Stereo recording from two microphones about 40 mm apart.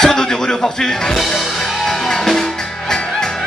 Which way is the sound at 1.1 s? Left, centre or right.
Centre.